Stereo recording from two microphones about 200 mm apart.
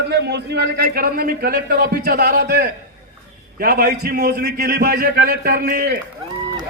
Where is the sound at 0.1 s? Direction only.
55° right (ahead or behind).